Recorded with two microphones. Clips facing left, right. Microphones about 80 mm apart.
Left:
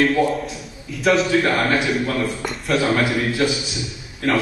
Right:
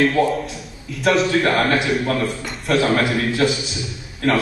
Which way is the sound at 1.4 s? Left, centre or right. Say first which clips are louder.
Right 1 dB; centre.